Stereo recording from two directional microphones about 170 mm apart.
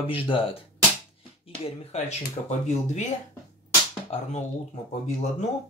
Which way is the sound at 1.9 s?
40° left (ahead or behind).